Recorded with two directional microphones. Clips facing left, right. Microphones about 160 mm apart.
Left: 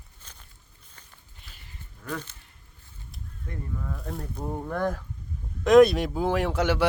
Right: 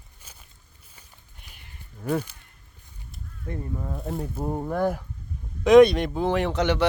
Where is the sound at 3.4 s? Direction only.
25° right (ahead or behind); by 5.0 s 10° right (ahead or behind).